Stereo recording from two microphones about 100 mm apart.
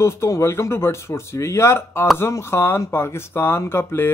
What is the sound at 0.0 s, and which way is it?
A man's voice, 30° left (ahead or behind).